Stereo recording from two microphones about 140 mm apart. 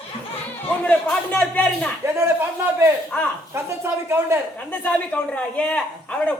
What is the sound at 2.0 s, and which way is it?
A man's voice, 15° right (ahead or behind).